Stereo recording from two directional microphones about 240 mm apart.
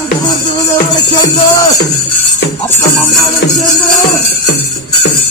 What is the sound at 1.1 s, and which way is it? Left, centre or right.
Music, centre.